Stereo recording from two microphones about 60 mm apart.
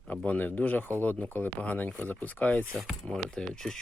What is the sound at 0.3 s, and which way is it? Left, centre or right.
Speech, left.